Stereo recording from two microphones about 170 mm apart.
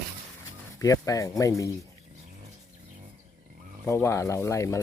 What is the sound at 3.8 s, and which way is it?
Speech, 15° left (ahead or behind).